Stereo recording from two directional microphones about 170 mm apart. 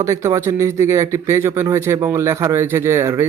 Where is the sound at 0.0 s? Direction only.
15° right (ahead or behind).